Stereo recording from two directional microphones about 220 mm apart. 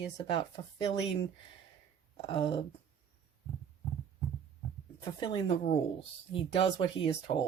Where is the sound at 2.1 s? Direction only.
25° left (ahead or behind).